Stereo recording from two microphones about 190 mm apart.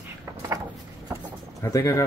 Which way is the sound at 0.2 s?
10° right (ahead or behind).